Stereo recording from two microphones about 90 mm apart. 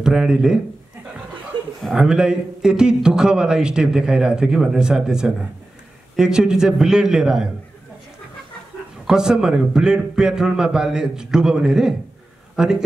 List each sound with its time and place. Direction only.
0.0 s a man's voice: 5° right (ahead or behind)
2.0 s a man's voice: 10° right (ahead or behind)
9.0 s a man's voice: 5° right (ahead or behind)